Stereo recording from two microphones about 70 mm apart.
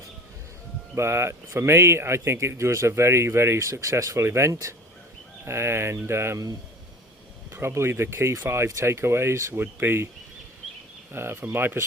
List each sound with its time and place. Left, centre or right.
0.9 s speech: right
7.5 s speech: right
11.1 s speech: right